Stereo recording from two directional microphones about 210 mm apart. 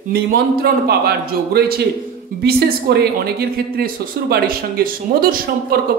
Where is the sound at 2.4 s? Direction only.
50° right (ahead or behind).